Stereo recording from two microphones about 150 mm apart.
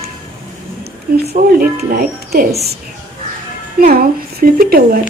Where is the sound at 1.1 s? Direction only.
90° right.